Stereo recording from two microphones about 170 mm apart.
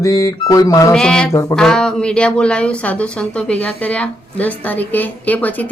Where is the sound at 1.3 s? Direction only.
20° left (ahead or behind).